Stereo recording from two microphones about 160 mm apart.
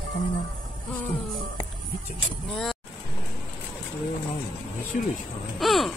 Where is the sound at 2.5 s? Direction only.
Centre (ahead or behind).